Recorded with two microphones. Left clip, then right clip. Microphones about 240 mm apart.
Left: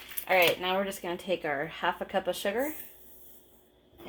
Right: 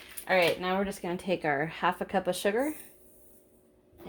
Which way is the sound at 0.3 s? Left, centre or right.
Right.